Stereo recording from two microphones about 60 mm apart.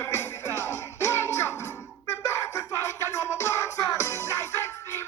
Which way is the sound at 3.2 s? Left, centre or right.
Left.